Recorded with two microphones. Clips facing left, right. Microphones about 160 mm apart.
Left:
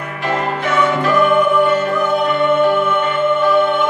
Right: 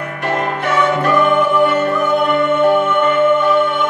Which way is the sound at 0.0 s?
50° right (ahead or behind).